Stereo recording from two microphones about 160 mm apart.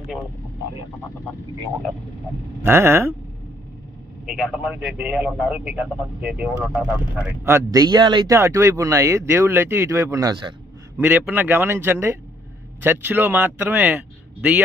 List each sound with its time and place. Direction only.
2.6 s a man's voice: 15° right (ahead or behind)
4.3 s a man's voice: centre (ahead or behind); by 8.4 s 30° right (ahead or behind)
8.4 s speech: 20° right (ahead or behind)
11.0 s a man's voice: 10° right (ahead or behind)